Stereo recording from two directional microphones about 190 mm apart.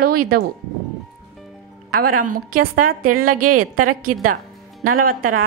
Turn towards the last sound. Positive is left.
turn(degrees=-45)  # may be behind; listen again after turning